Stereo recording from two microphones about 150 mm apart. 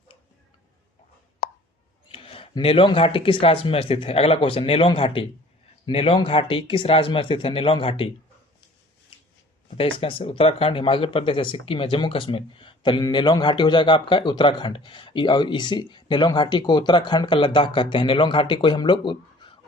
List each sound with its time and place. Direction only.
2.0 s speech: 35° left (ahead or behind)
9.6 s speech: 40° left (ahead or behind)